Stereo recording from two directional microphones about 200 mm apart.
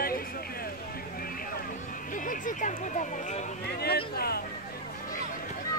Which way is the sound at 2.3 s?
40° left (ahead or behind).